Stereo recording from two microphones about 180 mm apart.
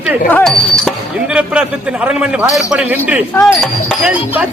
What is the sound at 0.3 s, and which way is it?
Speech, 5° left (ahead or behind).